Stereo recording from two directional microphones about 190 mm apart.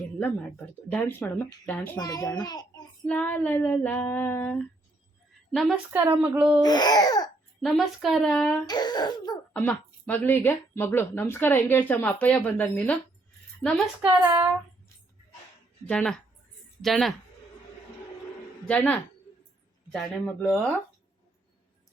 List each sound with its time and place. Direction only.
0.2 s a woman's voice: 10° left (ahead or behind)
3.1 s a woman's voice: 10° left (ahead or behind)
5.9 s speech: 10° right (ahead or behind)
6.6 s a child's voice: 20° left (ahead or behind)
7.6 s speech: centre (ahead or behind)
8.6 s laughter: 20° left (ahead or behind)
9.5 s a woman's voice: 10° left (ahead or behind)
15.9 s speech: 5° left (ahead or behind)
18.6 s speech: 5° left (ahead or behind)